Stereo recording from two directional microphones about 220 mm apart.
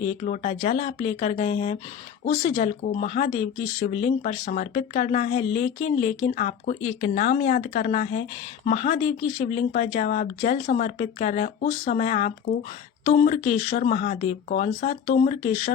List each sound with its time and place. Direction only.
0.0 s speech: 35° left (ahead or behind)